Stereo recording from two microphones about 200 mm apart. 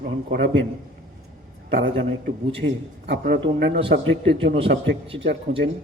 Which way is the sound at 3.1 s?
50° right (ahead or behind).